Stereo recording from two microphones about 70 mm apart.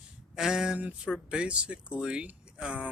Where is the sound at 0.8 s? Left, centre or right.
Centre.